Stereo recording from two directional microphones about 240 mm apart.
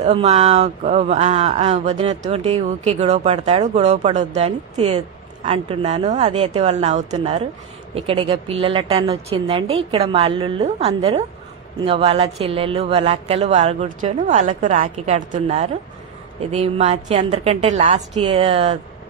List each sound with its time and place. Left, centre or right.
0.0 s speech: right